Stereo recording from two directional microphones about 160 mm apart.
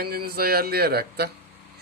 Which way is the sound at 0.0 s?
70° right (ahead or behind).